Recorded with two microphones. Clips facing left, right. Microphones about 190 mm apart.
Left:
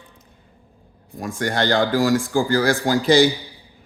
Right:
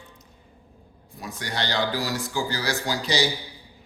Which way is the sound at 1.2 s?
50° left (ahead or behind).